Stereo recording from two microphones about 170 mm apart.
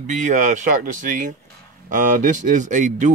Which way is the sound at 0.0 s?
45° right (ahead or behind).